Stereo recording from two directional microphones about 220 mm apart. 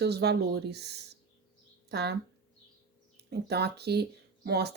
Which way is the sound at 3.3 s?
45° right (ahead or behind).